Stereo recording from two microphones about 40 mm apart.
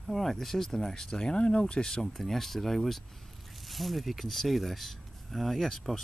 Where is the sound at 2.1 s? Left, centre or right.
Centre.